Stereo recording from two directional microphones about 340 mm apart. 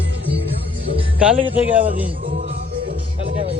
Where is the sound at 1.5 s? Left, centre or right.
Centre.